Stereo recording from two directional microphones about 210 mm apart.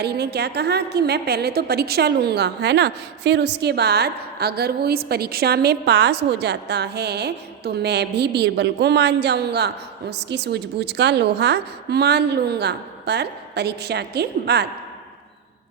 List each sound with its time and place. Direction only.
0.0 s a woman's voice: 50° right (ahead or behind)